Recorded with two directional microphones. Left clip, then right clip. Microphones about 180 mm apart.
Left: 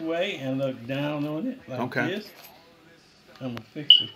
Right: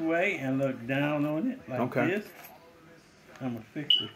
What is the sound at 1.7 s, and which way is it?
Speech, 5° right (ahead or behind).